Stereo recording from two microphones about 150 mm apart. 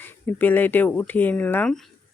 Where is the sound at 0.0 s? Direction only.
15° left (ahead or behind).